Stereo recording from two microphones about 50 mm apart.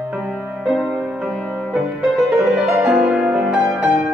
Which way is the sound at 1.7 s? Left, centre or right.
Centre.